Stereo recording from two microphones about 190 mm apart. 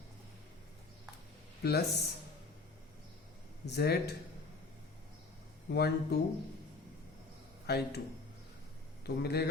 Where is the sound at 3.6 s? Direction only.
60° left (ahead or behind).